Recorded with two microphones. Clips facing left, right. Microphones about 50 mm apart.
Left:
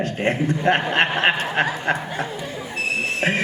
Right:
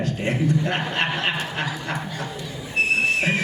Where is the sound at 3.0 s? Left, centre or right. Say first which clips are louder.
Even; left.